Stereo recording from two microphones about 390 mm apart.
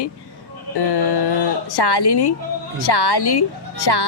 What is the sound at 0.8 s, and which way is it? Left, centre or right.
A woman's voice, left.